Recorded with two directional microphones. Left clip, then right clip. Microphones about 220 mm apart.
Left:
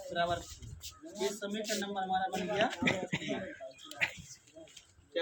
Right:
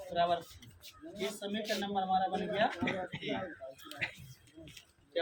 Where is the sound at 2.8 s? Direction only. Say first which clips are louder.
Left 3 dB; 50° left (ahead or behind).